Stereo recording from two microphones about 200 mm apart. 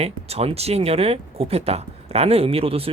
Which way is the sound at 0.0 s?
30° right (ahead or behind).